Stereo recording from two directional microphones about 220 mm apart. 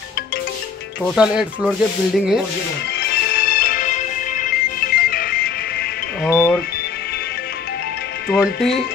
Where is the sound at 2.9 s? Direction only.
45° left (ahead or behind).